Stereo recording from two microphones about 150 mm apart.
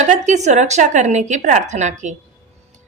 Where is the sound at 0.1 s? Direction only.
50° right (ahead or behind).